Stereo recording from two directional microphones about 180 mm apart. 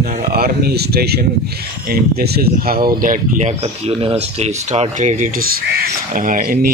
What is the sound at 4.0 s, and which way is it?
Speech, 35° right (ahead or behind).